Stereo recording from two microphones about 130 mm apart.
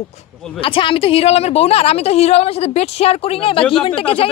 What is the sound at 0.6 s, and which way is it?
Speech, 45° left (ahead or behind).